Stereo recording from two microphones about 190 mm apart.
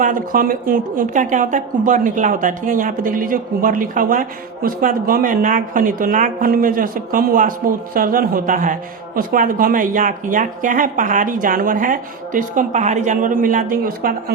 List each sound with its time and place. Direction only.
0.0 s a woman's voice: 45° right (ahead or behind)